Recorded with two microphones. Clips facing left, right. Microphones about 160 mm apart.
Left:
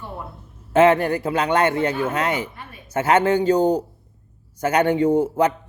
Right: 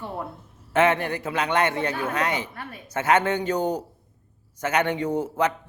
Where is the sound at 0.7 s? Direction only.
30° left (ahead or behind).